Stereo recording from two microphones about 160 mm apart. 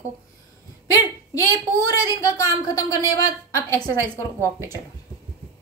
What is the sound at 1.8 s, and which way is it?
A woman's voice, 20° left (ahead or behind).